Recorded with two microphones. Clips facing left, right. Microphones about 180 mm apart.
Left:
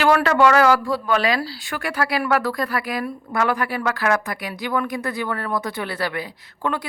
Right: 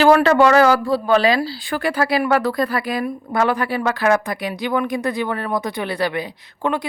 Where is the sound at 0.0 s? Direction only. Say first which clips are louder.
Right 4 dB; 30° right (ahead or behind).